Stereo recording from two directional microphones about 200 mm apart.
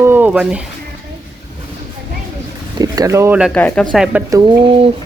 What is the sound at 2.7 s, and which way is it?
Speech, 20° right (ahead or behind).